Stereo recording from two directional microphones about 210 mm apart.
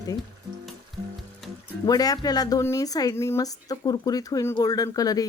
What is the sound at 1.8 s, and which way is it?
Speech, 15° left (ahead or behind).